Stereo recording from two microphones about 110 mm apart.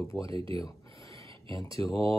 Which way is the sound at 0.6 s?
30° left (ahead or behind).